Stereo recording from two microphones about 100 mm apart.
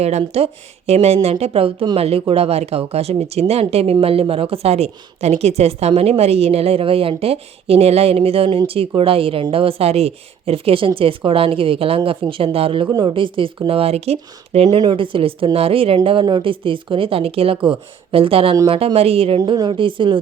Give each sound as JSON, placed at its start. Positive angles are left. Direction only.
{"t": 0.0, "sound": "speech", "side_deg": -90}
{"t": 2.0, "sound": "speech", "side_deg": -80}
{"t": 4.0, "sound": "a woman's voice", "side_deg": -70}
{"t": 12.9, "sound": "speech", "side_deg": -50}
{"t": 14.8, "sound": "a woman's voice", "side_deg": -55}
{"t": 16.0, "sound": "a woman's voice", "side_deg": -55}
{"t": 18.9, "sound": "speech", "side_deg": -80}
{"t": 19.7, "sound": "a woman's voice", "side_deg": -60}